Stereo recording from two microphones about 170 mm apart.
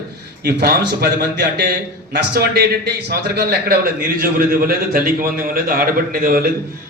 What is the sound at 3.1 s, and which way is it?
A man's voice, 70° right (ahead or behind).